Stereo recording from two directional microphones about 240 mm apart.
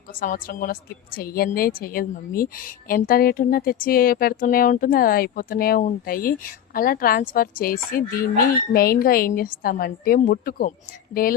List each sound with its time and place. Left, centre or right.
0.2 s a woman's voice: left